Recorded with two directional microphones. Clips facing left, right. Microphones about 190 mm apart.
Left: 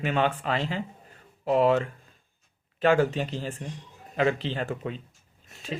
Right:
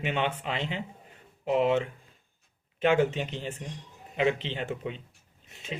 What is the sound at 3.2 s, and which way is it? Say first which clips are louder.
Speech: left 3 dB; 40° left (ahead or behind).